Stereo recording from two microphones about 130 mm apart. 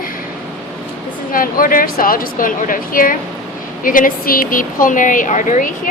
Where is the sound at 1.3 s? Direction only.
90° left.